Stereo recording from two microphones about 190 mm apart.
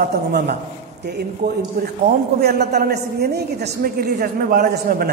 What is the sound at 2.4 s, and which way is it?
A woman's voice, 60° right (ahead or behind).